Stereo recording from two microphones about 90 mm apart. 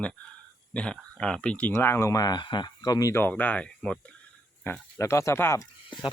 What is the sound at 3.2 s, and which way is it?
Speech, 20° left (ahead or behind).